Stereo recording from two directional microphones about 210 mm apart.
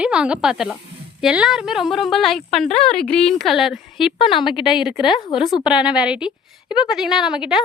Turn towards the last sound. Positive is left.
turn(degrees=-5)  # may be behind; listen again after turning